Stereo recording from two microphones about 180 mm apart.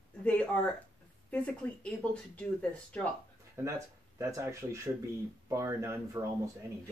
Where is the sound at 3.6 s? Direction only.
15° right (ahead or behind).